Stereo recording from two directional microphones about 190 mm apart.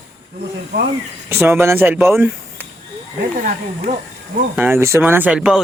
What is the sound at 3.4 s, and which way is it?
Speech, 45° right (ahead or behind).